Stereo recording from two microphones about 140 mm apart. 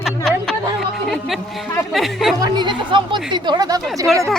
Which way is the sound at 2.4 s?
35° right (ahead or behind).